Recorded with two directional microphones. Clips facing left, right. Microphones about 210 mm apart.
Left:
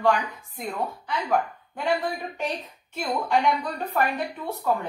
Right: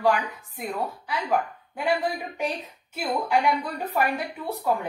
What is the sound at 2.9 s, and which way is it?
A woman's voice, 10° right (ahead or behind).